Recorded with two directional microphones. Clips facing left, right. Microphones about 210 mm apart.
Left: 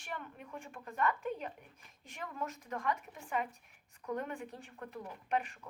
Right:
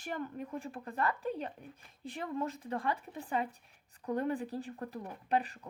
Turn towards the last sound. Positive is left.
turn(degrees=-35)  # may be behind; listen again after turning